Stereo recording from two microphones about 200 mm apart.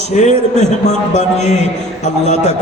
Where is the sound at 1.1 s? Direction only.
35° left (ahead or behind).